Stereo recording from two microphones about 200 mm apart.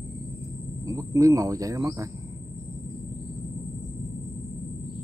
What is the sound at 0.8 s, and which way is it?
Speech, 15° right (ahead or behind).